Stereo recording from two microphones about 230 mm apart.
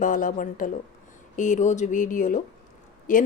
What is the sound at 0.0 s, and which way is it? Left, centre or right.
Speech, left.